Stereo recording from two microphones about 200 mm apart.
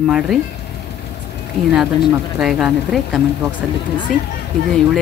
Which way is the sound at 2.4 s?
Centre (ahead or behind).